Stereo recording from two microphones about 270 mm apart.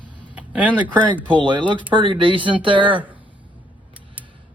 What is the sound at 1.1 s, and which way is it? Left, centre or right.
Speech, centre.